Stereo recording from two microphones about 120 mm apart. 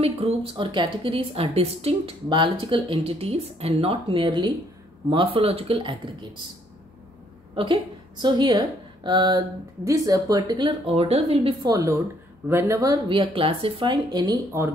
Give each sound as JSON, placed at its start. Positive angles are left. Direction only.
{"t": 0.0, "sound": "a woman's voice", "side_deg": -55}
{"t": 7.5, "sound": "a woman's voice", "side_deg": -45}
{"t": 10.9, "sound": "a woman's voice", "side_deg": -55}
{"t": 11.3, "sound": "a woman's voice", "side_deg": -35}
{"t": 12.4, "sound": "speech", "side_deg": -20}
{"t": 13.1, "sound": "a woman's voice", "side_deg": -50}
{"t": 14.1, "sound": "speech", "side_deg": -30}